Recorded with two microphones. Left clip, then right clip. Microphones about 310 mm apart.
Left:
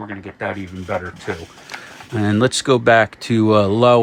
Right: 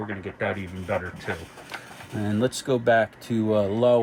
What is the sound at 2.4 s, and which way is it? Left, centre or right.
Speech, left.